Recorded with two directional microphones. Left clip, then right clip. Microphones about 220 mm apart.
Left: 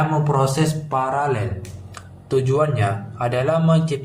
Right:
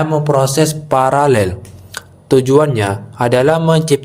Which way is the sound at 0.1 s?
45° right (ahead or behind).